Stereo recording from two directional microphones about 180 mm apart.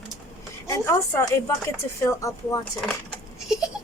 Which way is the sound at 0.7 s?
15° left (ahead or behind).